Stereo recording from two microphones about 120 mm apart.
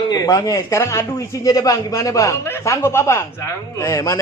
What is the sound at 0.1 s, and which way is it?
A man's voice, 30° left (ahead or behind).